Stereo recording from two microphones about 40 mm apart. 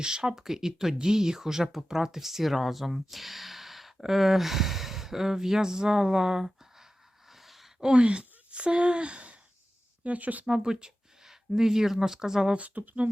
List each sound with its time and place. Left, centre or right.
0.0 s speech: centre
7.3 s gasp: centre
7.8 s speech: right
10.4 s speech: centre
12.5 s speech: right